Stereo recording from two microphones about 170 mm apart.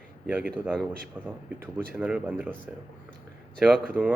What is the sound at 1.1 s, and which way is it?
Speech, 10° right (ahead or behind).